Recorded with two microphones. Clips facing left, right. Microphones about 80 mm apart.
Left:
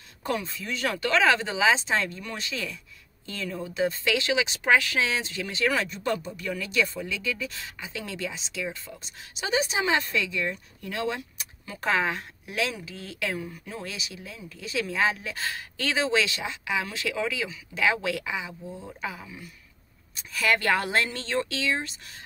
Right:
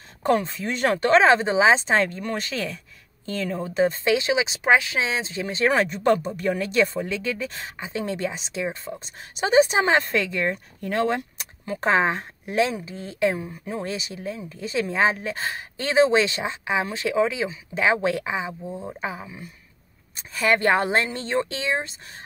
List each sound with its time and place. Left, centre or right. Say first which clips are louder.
0.2 s speech: right 8 dB; right
8.9 s speech: right 7 dB; right